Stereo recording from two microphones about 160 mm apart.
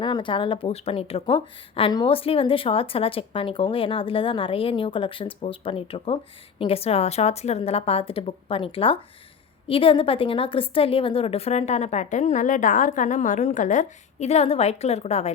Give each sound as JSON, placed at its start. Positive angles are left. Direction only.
{"t": 0.0, "sound": "a woman's voice", "side_deg": 30}